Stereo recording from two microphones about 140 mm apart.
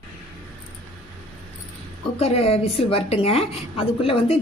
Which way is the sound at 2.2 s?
45° left (ahead or behind).